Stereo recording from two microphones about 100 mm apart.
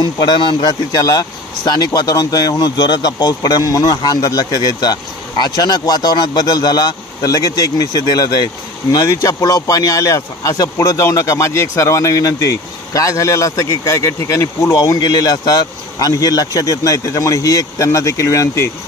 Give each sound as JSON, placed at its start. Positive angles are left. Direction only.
{"t": 0.0, "sound": "speech", "side_deg": 45}